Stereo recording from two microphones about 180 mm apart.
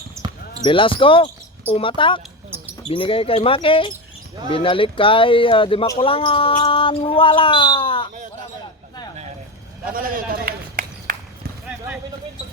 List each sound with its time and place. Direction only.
0.2 s basketball bounce: 15° right (ahead or behind)
0.6 s speech: 30° left (ahead or behind)
9.9 s run: 50° right (ahead or behind)